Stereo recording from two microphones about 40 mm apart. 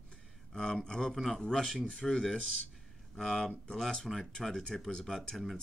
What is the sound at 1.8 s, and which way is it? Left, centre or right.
Speech, centre.